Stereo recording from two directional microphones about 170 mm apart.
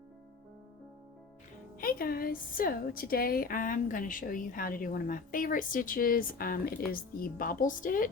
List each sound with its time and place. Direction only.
1.8 s a woman's voice: 60° left (ahead or behind)